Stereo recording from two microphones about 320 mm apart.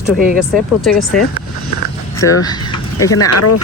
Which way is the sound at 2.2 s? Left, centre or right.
Centre.